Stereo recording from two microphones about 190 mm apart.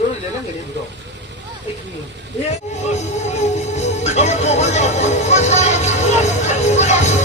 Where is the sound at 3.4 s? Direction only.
35° left (ahead or behind).